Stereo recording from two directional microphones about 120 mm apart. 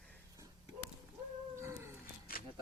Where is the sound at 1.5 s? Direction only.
25° right (ahead or behind).